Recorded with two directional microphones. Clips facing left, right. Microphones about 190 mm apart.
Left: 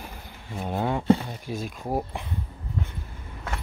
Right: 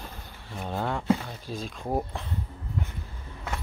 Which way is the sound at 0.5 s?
15° left (ahead or behind).